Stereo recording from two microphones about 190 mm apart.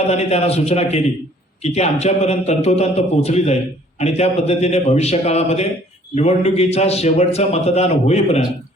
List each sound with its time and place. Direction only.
0.1 s a man's voice: 35° left (ahead or behind)